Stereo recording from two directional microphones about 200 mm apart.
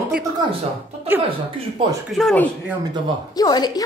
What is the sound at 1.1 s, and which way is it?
Speech, 10° right (ahead or behind).